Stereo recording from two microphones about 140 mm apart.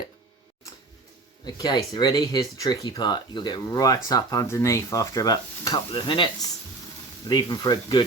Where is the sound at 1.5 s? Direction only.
30° left (ahead or behind).